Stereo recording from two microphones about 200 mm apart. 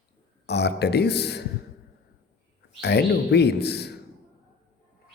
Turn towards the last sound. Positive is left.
turn(degrees=55)  # may be behind; listen again after turning